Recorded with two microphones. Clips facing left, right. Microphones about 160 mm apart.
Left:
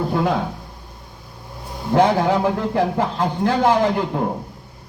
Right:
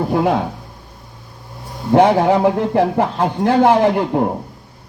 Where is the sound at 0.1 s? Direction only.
25° right (ahead or behind).